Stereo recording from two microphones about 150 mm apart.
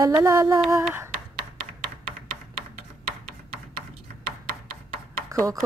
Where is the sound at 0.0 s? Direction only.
25° right (ahead or behind).